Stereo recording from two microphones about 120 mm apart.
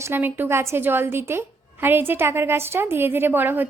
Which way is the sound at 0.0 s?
15° right (ahead or behind).